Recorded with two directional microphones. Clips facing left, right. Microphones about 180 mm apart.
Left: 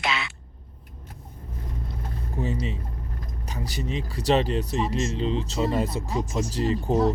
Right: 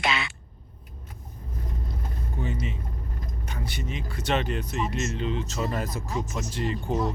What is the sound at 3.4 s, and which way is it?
Speech, 35° left (ahead or behind).